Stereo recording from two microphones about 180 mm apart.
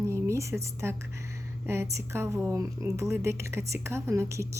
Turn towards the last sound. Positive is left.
turn(degrees=-15)  # may be behind; listen again after turning